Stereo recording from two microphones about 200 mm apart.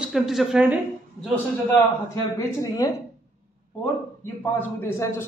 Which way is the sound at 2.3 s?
15° left (ahead or behind).